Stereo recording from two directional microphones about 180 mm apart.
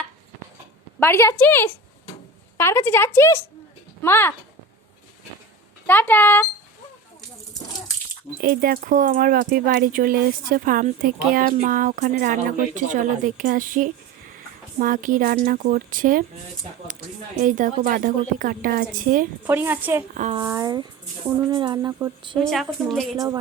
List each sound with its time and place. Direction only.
0.9 s speech: 15° left (ahead or behind)
5.8 s speech: 10° left (ahead or behind)
8.4 s speech: 55° right (ahead or behind)
17.4 s speech: 45° right (ahead or behind)
19.5 s a woman's voice: 10° right (ahead or behind)
20.1 s speech: 40° right (ahead or behind)
20.4 s speech: 20° right (ahead or behind)
22.4 s a woman's voice: centre (ahead or behind)
23.1 s speech: 20° right (ahead or behind)